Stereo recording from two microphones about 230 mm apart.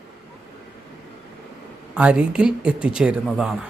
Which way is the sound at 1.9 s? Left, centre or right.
Centre.